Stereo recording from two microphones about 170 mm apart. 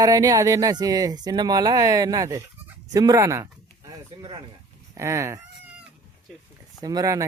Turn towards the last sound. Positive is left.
turn(degrees=-20)  # may be behind; listen again after turning